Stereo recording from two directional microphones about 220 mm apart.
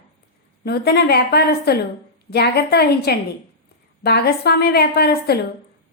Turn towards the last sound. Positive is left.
turn(degrees=45)  # may be behind; listen again after turning